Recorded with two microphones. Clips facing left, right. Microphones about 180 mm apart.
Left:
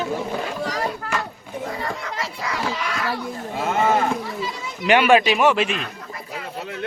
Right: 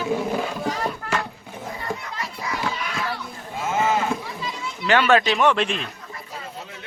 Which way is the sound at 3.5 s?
60° left (ahead or behind).